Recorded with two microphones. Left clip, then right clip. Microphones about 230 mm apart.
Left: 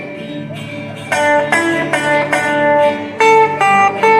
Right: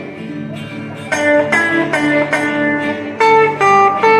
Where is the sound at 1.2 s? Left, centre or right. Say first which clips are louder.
Even; left.